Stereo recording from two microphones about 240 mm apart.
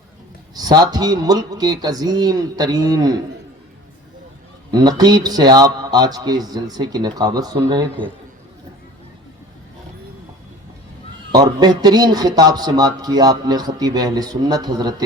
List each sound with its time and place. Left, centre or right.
0.5 s speech: centre
4.7 s speech: centre
11.3 s speech: centre